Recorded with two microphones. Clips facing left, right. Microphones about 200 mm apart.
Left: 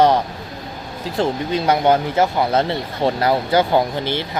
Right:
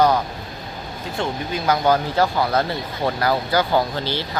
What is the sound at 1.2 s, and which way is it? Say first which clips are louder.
Speech: left 6 dB; 30° left (ahead or behind).